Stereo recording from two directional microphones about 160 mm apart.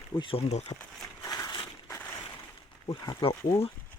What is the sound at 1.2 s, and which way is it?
Crushing, 25° left (ahead or behind).